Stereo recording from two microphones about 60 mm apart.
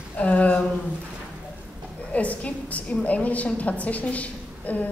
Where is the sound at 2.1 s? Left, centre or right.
Left.